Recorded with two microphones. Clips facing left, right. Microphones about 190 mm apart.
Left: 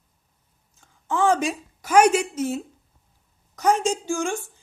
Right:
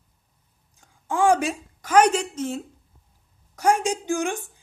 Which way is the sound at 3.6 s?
10° right (ahead or behind).